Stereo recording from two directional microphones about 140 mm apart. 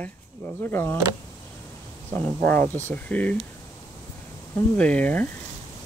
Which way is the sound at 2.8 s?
10° left (ahead or behind).